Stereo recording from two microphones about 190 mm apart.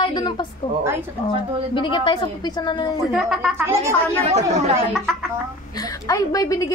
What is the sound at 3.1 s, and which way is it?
Speech, centre (ahead or behind).